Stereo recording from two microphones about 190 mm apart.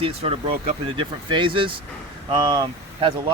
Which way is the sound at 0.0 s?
30° right (ahead or behind).